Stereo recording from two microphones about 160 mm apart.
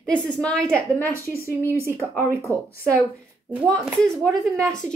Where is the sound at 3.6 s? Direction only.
5° left (ahead or behind).